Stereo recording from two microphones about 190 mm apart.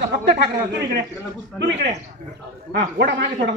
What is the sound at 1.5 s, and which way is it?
Speech, 65° right (ahead or behind).